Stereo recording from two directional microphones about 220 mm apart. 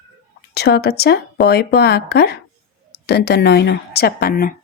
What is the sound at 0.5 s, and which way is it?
Speech, 50° left (ahead or behind).